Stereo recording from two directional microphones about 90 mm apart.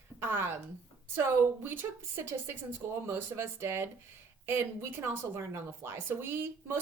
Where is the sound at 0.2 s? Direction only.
25° right (ahead or behind).